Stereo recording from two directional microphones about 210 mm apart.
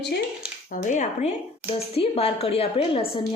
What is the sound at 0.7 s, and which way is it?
A woman's voice, 35° left (ahead or behind).